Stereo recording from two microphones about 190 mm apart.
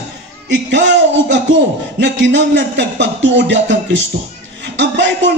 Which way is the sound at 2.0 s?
65° right (ahead or behind).